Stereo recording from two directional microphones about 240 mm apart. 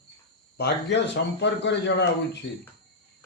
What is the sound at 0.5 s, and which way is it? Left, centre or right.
Speech, left.